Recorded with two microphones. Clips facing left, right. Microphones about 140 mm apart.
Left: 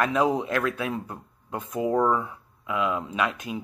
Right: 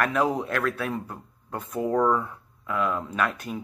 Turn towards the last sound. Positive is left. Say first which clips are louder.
# even
turn(degrees=15)  # may be behind; listen again after turning